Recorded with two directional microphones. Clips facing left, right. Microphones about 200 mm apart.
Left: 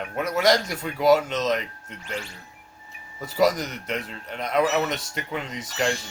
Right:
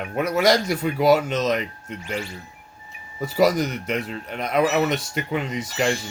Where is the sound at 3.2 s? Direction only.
10° right (ahead or behind).